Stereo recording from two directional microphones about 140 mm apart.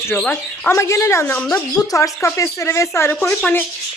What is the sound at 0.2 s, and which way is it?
Speech, 5° left (ahead or behind).